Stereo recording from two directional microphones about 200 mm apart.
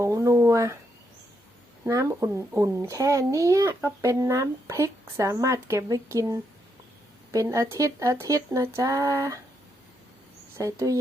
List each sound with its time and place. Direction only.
0.0 s speech: 15° right (ahead or behind)
1.8 s a child's voice: 15° right (ahead or behind)
10.6 s a child's voice: 15° right (ahead or behind)